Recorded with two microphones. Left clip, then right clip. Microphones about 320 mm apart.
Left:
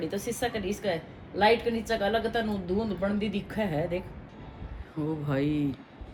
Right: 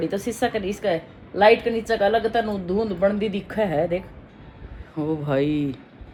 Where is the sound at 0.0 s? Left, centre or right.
Right.